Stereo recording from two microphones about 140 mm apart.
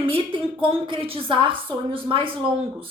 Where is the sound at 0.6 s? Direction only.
40° right (ahead or behind).